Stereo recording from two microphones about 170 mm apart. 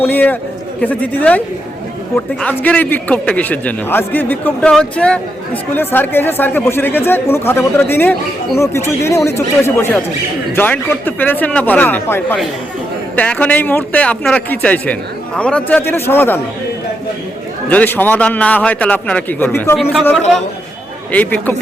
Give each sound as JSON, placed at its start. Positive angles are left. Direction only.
{"t": 0.0, "sound": "a man's voice", "side_deg": 10}
{"t": 17.7, "sound": "a man's voice", "side_deg": 10}
{"t": 19.7, "sound": "a man's voice", "side_deg": 0}
{"t": 21.1, "sound": "a man's voice", "side_deg": 10}